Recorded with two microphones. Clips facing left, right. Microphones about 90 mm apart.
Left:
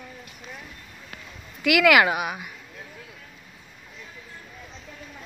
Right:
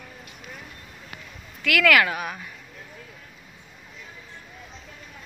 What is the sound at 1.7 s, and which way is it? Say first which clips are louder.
Speech: left 2 dB; 15° left (ahead or behind).